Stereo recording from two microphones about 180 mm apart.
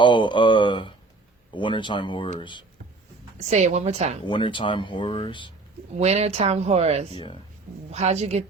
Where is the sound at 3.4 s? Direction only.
40° right (ahead or behind).